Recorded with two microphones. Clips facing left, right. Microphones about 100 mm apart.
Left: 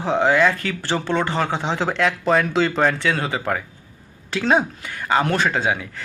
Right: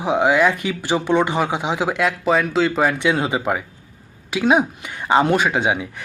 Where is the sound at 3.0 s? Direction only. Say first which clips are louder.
Right 3 dB; 15° right (ahead or behind).